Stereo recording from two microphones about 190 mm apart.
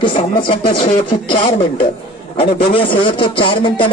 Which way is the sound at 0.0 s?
25° left (ahead or behind).